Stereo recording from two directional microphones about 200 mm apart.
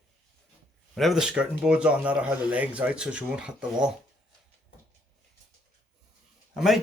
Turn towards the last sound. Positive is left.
turn(degrees=0)  # may be behind; listen again after turning